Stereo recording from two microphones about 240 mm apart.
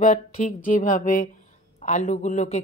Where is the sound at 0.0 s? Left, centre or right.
Left.